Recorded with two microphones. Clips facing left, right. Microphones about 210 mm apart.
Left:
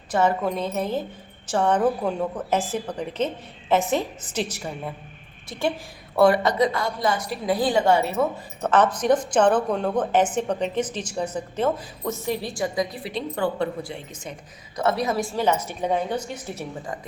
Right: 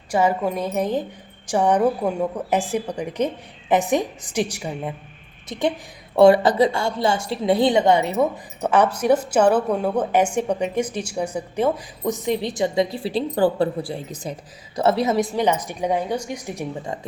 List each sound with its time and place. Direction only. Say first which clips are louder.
0.1 s a woman's voice: right 2 dB; 10° right (ahead or behind)